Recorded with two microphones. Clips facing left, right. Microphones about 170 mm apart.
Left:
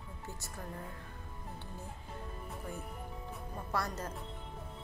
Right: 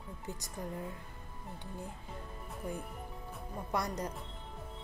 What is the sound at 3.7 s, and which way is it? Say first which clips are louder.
Music: right 2 dB; 15° right (ahead or behind).